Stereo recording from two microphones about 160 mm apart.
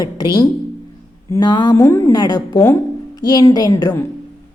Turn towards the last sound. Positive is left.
turn(degrees=20)  # may be behind; listen again after turning